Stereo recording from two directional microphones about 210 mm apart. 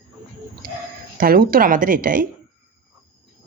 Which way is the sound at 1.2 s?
45° right (ahead or behind).